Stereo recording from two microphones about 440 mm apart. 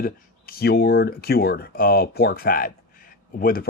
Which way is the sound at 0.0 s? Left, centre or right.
Centre.